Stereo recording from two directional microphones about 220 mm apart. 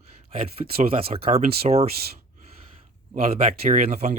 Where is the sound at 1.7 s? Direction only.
25° right (ahead or behind).